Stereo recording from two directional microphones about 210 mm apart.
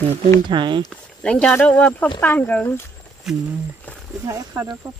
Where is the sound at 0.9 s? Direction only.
5° left (ahead or behind).